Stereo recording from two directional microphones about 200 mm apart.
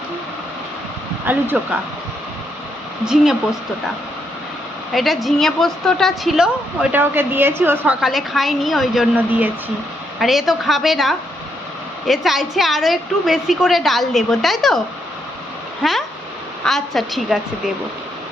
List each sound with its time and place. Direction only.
1.3 s a woman's voice: 10° right (ahead or behind)
3.0 s a woman's voice: 5° right (ahead or behind)
4.9 s a woman's voice: centre (ahead or behind)
15.8 s a woman's voice: centre (ahead or behind)